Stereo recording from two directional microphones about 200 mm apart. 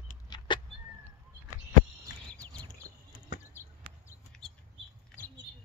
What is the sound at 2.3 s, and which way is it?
Bird, 5° left (ahead or behind).